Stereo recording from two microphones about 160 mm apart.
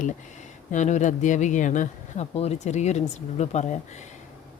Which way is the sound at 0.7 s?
50° left (ahead or behind).